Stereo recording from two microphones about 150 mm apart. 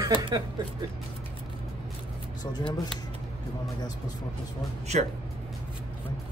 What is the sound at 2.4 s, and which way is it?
Speech, 30° left (ahead or behind).